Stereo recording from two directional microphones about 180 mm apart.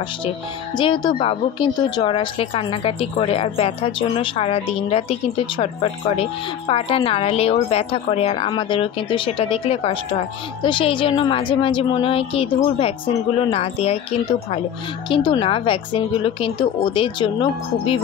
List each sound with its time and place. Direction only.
0.7 s a woman's voice: 25° left (ahead or behind)
15.0 s a woman's voice: 30° left (ahead or behind)